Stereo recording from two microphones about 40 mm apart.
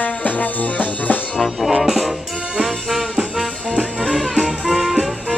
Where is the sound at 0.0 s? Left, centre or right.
Left.